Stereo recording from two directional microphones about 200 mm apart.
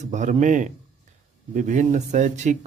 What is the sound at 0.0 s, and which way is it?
Speech, 40° right (ahead or behind).